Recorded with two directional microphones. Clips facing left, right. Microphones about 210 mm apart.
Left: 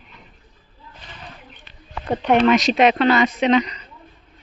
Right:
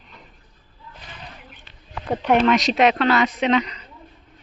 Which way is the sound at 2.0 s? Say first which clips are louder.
Left 2 dB; centre (ahead or behind).